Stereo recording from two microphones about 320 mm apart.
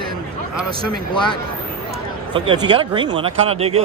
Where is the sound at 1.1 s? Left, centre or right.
Centre.